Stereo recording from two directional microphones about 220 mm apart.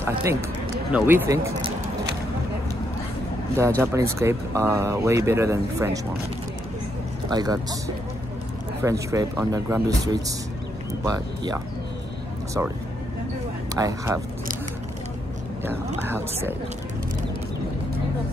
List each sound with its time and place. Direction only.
0.0 s speech: 15° right (ahead or behind)
3.5 s speech: 15° right (ahead or behind)
7.2 s speech: 15° right (ahead or behind)
8.8 s speech: 15° right (ahead or behind)
13.7 s speech: 15° right (ahead or behind)
16.0 s speech: 10° right (ahead or behind)